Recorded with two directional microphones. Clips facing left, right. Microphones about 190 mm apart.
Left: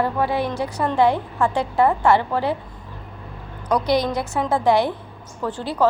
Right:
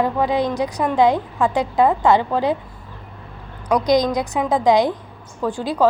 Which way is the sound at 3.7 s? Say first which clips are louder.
Right 3 dB; 15° right (ahead or behind).